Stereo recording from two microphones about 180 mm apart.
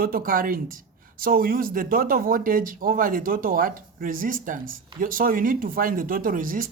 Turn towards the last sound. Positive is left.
turn(degrees=-50)  # may be behind; listen again after turning